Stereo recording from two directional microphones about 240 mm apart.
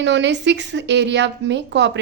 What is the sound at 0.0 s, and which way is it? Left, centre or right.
Speech, right.